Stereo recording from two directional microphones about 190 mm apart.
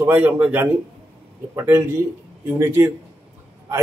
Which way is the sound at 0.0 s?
10° right (ahead or behind).